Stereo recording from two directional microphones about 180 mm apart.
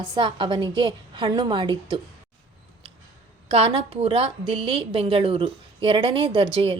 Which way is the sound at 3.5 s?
30° right (ahead or behind).